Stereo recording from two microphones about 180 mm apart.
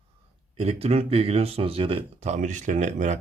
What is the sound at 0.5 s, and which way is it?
Speech, 35° right (ahead or behind).